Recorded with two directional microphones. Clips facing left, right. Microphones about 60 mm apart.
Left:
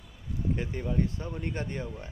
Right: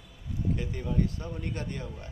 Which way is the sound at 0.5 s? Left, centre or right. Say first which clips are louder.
Left 1 dB; left.